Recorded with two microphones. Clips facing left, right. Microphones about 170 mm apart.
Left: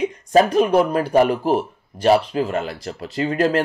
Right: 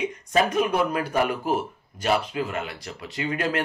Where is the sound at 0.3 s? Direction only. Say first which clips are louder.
Left 7 dB; 35° left (ahead or behind).